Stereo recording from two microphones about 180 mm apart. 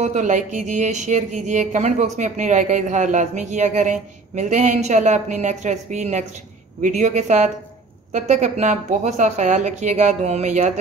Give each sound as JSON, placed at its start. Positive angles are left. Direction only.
{"t": 0.0, "sound": "speech", "side_deg": -40}